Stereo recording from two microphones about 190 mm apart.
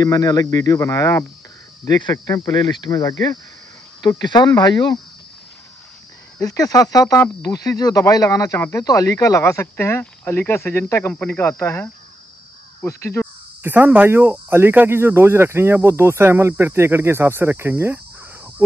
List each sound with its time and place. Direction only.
0.0 s speech: 20° left (ahead or behind)
6.4 s speech: 20° left (ahead or behind)
13.6 s speech: 10° right (ahead or behind)